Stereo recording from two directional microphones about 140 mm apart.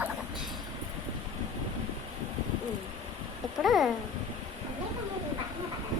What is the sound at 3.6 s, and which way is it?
Speech, centre (ahead or behind).